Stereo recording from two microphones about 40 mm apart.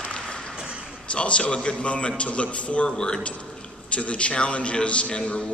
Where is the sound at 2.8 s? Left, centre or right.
Centre.